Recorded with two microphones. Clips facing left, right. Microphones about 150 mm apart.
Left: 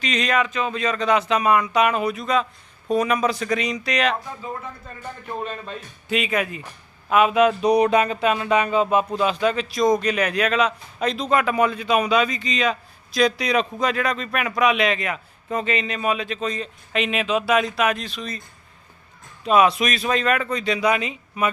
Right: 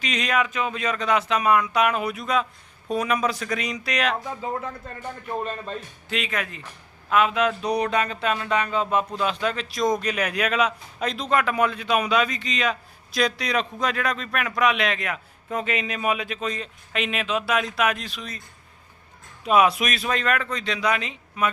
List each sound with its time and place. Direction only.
0.0 s a man's voice: 10° right (ahead or behind)
5.6 s a man's voice: 10° left (ahead or behind)
19.5 s a man's voice: 5° right (ahead or behind)